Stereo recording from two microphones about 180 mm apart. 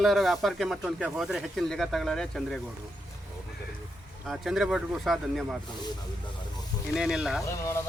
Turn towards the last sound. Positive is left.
turn(degrees=15)  # may be behind; listen again after turning